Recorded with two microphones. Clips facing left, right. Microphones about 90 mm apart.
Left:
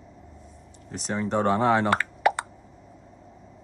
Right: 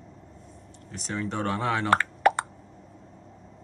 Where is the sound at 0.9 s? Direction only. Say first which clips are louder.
Left 3 dB; 5° left (ahead or behind).